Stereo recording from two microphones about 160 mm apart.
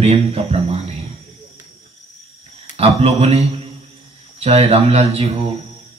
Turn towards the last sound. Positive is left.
turn(degrees=-40)  # may be behind; listen again after turning